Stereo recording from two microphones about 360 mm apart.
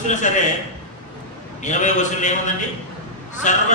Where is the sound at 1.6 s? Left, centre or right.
Centre.